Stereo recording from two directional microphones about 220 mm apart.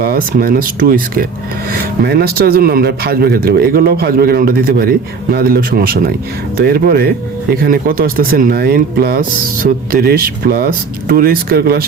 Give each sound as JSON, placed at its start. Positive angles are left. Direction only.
{"t": 0.0, "sound": "speech", "side_deg": -40}